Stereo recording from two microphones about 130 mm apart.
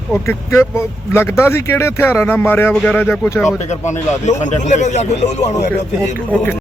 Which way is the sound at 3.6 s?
60° left (ahead or behind).